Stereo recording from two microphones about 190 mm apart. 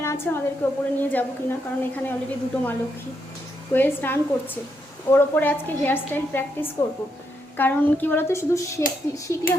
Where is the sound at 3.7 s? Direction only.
10° left (ahead or behind).